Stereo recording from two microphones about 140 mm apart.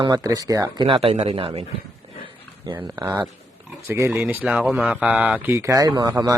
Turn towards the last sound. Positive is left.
turn(degrees=-30)  # may be behind; listen again after turning